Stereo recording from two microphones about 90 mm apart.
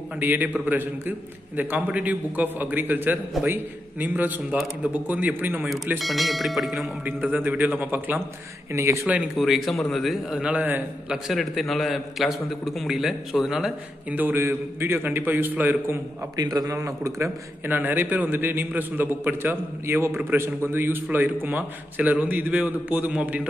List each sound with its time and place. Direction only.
0.2 s a man's voice: 20° right (ahead or behind)
5.9 s a man's voice: centre (ahead or behind)
7.1 s a man's voice: 20° right (ahead or behind)
8.7 s a man's voice: 30° right (ahead or behind)
9.0 s a man's voice: 15° right (ahead or behind)
9.4 s a man's voice: centre (ahead or behind)
10.3 s a man's voice: 15° right (ahead or behind)
11.1 s a man's voice: 5° right (ahead or behind)
14.1 s a man's voice: 25° right (ahead or behind)
16.3 s a man's voice: 45° right (ahead or behind)
17.6 s a man's voice: 20° right (ahead or behind)